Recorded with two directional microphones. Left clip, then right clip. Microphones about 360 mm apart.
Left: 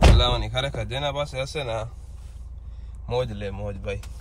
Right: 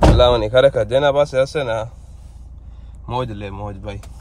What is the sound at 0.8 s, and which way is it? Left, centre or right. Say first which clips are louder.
Speech: right 13 dB; centre.